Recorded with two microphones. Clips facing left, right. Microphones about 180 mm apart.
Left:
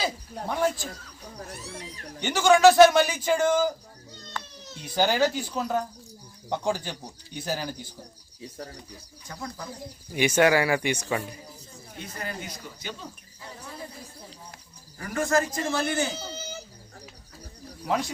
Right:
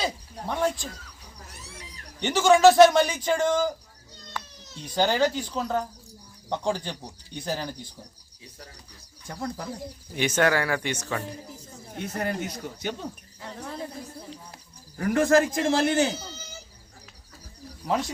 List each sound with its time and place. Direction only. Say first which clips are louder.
0.0 s speech: even; 5° left (ahead or behind)
1.4 s speech: left 7 dB; 55° left (ahead or behind)
2.2 s a man's voice: right 1 dB; centre (ahead or behind)
4.4 s cat: right 1 dB; 10° right (ahead or behind)
4.9 s speech: even; 5° left (ahead or behind)
10.2 s speech: left 3 dB; 10° left (ahead or behind)
11.9 s speech: right 7 dB; 65° right (ahead or behind)
14.9 s speech: right 5 dB; 60° right (ahead or behind)
17.8 s a man's voice: right 1 dB; centre (ahead or behind)